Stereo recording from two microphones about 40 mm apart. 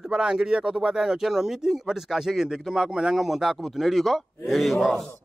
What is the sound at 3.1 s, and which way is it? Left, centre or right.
A man's voice, centre.